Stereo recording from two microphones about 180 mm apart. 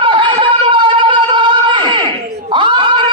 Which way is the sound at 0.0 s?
25° right (ahead or behind).